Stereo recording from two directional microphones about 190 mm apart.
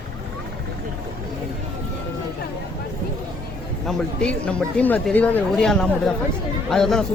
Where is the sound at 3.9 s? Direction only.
5° left (ahead or behind).